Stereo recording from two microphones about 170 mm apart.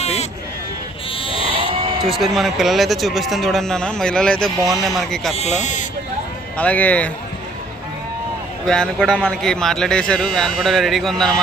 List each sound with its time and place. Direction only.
0.0 s a sound: 40° left (ahead or behind)
1.2 s sheep: 30° left (ahead or behind)
2.0 s speech: centre (ahead or behind)
5.3 s speech: 40° left (ahead or behind)
6.6 s a man's voice: 10° left (ahead or behind)
8.6 s speech: 5° left (ahead or behind)